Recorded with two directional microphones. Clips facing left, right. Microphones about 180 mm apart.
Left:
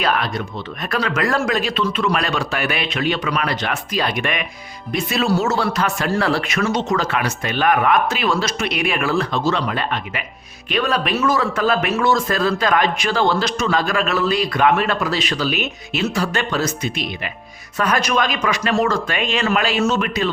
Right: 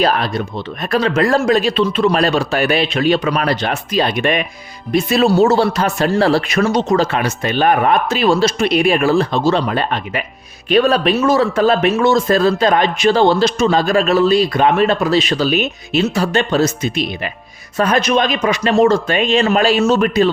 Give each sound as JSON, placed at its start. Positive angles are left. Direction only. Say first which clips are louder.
{"t": 0.0, "sound": "speech", "louder": "right 5 dB", "side_deg": -30}